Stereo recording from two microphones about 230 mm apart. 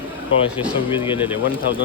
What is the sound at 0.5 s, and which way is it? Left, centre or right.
Speech, left.